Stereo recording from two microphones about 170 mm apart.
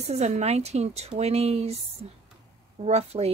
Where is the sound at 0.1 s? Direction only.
40° right (ahead or behind).